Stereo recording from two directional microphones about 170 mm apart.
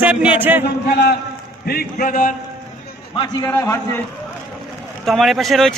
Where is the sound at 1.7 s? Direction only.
55° left (ahead or behind).